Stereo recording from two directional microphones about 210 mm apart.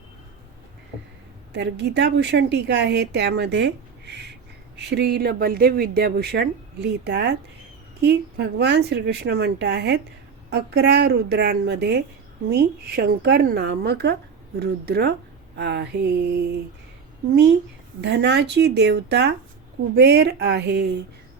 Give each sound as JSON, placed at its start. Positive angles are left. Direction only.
{"t": 1.5, "sound": "a woman's voice", "side_deg": -55}
{"t": 18.0, "sound": "a woman's voice", "side_deg": -55}